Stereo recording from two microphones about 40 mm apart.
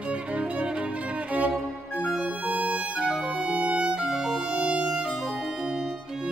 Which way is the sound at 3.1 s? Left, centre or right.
Right.